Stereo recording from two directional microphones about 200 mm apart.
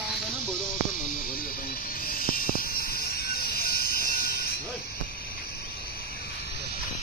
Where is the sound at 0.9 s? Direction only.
45° left (ahead or behind).